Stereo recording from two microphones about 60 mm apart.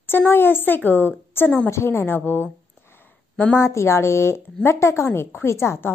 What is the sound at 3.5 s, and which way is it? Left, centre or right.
A woman's voice, left.